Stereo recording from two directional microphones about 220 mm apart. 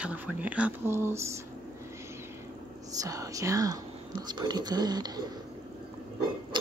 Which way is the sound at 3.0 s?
15° right (ahead or behind).